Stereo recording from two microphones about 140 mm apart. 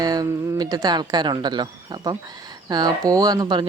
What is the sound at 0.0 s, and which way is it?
Speech, 25° right (ahead or behind).